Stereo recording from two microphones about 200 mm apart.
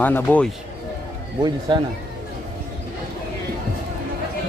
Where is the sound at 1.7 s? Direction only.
20° right (ahead or behind).